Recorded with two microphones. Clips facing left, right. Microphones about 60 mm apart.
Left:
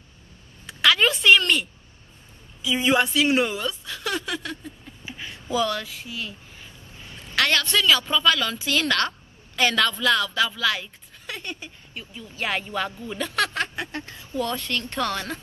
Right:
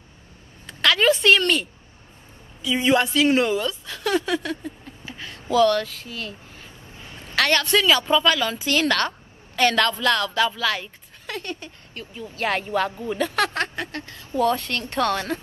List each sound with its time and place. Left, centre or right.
0.7 s a sound: centre
2.6 s a woman's voice: centre
5.0 s a sound: centre
7.3 s a woman's voice: centre
11.2 s speech: centre
12.1 s speech: right
13.2 s speech: centre
13.7 s speech: left
14.4 s a woman's voice: centre